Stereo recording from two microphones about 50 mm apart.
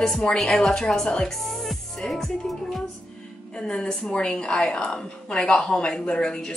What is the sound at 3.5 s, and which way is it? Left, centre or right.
A woman's voice, centre.